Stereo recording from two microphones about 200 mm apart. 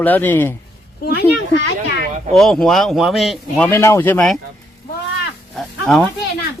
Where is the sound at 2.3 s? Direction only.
Centre (ahead or behind).